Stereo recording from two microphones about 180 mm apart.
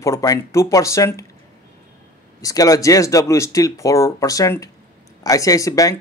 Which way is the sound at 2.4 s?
20° left (ahead or behind).